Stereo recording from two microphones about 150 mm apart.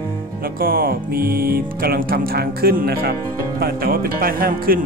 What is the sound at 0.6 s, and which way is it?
Speech, 75° right (ahead or behind).